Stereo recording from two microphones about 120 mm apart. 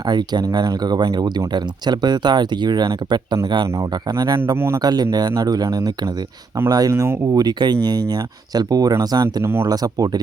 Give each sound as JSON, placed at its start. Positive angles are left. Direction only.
{"t": 0.0, "sound": "speech", "side_deg": -35}
{"t": 3.8, "sound": "speech", "side_deg": -30}
{"t": 4.8, "sound": "speech", "side_deg": -35}
{"t": 7.4, "sound": "speech", "side_deg": -35}
{"t": 9.4, "sound": "speech", "side_deg": -20}
{"t": 9.6, "sound": "speech", "side_deg": -30}